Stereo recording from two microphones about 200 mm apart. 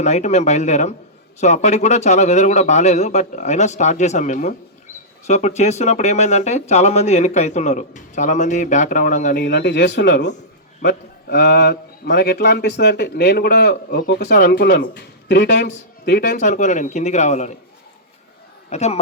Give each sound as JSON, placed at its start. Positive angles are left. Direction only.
{"t": 0.0, "sound": "a man's voice", "side_deg": 35}
{"t": 16.4, "sound": "speech", "side_deg": 40}
{"t": 18.7, "sound": "speech", "side_deg": 35}